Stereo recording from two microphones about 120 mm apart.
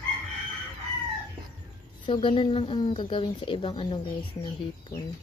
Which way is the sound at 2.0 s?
45° left (ahead or behind).